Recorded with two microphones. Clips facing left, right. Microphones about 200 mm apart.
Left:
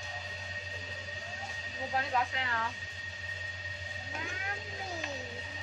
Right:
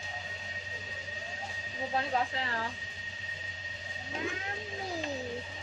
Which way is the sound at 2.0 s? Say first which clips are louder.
Right 1 dB; 30° right (ahead or behind).